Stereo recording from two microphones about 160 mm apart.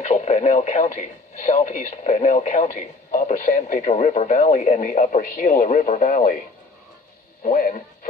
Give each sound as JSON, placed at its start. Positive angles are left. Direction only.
{"t": 0.0, "sound": "speech", "side_deg": 50}
{"t": 7.4, "sound": "speech", "side_deg": 55}